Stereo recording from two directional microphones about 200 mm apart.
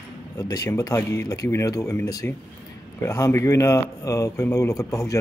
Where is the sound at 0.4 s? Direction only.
15° left (ahead or behind).